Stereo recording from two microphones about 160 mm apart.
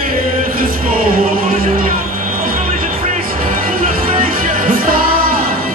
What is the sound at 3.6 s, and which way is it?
Music, 60° right (ahead or behind).